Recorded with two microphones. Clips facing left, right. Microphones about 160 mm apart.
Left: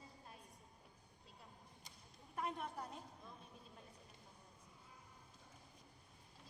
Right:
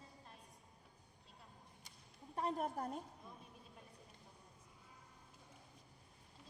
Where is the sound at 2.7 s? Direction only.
50° right (ahead or behind).